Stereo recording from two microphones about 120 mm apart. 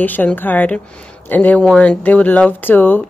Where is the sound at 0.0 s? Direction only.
15° left (ahead or behind).